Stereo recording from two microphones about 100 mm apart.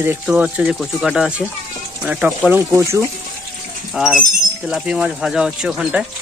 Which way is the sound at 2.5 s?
25° right (ahead or behind).